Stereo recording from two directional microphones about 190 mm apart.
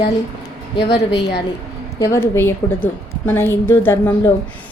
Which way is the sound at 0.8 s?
65° left (ahead or behind).